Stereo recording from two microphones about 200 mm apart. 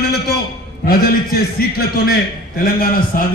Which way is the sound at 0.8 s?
50° left (ahead or behind).